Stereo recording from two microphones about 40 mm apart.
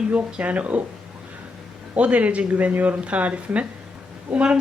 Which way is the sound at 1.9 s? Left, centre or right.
Right.